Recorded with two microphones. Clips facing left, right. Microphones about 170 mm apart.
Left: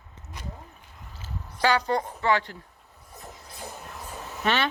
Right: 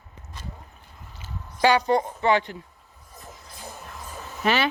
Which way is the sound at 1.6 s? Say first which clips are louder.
Right 4 dB; 15° right (ahead or behind).